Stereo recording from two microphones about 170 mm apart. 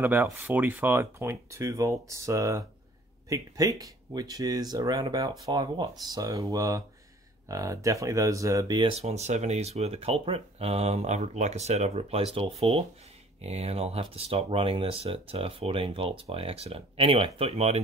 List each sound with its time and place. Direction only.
0.0 s speech: 10° right (ahead or behind)
9.0 s speech: 40° right (ahead or behind)